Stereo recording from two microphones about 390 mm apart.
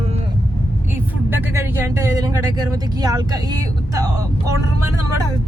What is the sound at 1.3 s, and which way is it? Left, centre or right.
Speech, centre.